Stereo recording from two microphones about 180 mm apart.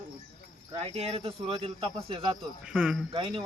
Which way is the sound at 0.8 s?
35° right (ahead or behind).